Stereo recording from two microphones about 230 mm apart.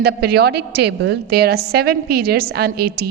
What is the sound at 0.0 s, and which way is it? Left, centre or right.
A woman's voice, right.